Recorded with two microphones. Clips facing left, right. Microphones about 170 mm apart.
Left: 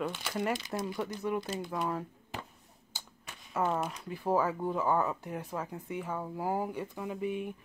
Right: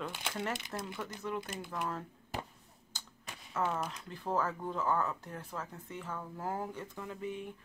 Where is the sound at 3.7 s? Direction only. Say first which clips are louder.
Left 4 dB; 5° left (ahead or behind).